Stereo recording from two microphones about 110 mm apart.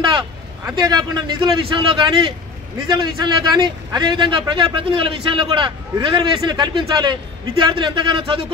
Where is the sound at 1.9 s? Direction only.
45° right (ahead or behind).